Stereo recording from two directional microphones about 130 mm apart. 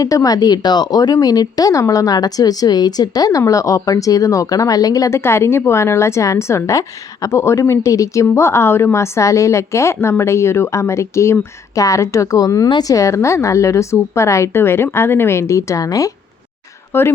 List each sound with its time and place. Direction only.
0.0 s speech: 25° left (ahead or behind)